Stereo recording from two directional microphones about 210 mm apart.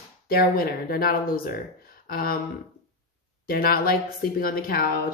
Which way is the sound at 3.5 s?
45° left (ahead or behind).